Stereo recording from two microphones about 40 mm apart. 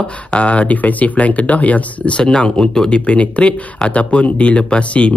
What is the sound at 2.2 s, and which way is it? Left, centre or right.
Speech, centre.